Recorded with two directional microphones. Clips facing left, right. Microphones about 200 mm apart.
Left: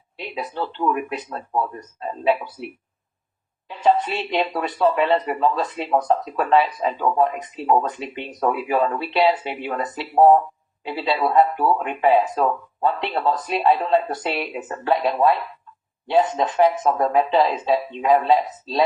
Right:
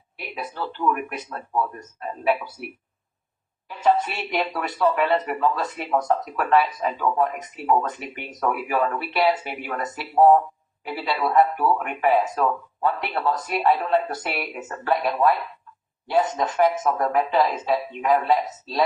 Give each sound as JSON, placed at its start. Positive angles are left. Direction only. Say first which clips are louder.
{"t": 0.2, "sound": "speech", "louder": "left 4 dB", "side_deg": 25}
{"t": 4.0, "sound": "speech", "louder": "left 3 dB", "side_deg": 25}
{"t": 16.4, "sound": "speech", "louder": "left 3 dB", "side_deg": 25}